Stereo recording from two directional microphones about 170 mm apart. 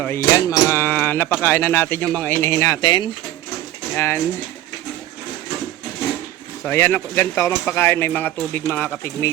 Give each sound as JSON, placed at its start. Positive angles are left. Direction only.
{"t": 0.3, "sound": "speech", "side_deg": 15}
{"t": 6.7, "sound": "speech", "side_deg": 15}